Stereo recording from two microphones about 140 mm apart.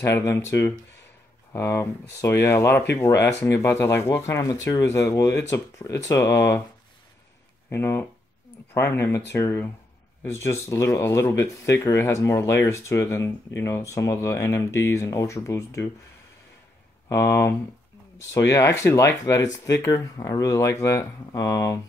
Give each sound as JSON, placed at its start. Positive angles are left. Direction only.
{"t": 0.0, "sound": "speech", "side_deg": 20}
{"t": 7.7, "sound": "speech", "side_deg": 15}
{"t": 17.1, "sound": "speech", "side_deg": 20}